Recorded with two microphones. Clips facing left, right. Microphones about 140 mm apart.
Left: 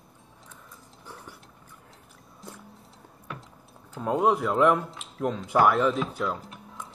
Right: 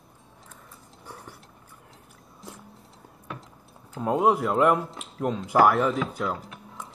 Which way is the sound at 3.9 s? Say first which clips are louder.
Right 1 dB; 5° right (ahead or behind).